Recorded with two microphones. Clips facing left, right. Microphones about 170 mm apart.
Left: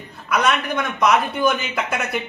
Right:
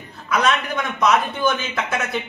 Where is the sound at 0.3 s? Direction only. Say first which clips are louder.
Even; 10° left (ahead or behind).